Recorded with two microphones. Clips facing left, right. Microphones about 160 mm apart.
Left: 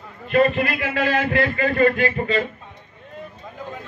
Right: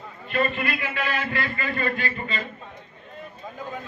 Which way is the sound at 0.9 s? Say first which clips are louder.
Left 7 dB; 40° left (ahead or behind).